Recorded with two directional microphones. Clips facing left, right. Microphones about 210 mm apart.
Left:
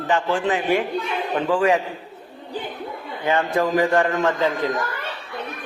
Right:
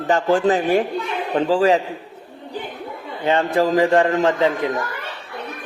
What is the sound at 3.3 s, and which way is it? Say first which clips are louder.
A man's voice: right 3 dB; 30° right (ahead or behind).